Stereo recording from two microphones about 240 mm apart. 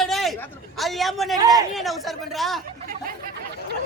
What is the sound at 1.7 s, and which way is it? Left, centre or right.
Speech, centre.